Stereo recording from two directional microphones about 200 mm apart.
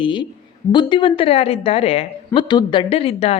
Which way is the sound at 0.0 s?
25° left (ahead or behind).